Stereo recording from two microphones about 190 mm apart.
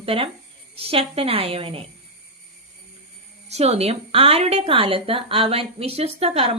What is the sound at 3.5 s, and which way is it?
A woman's voice, 35° right (ahead or behind).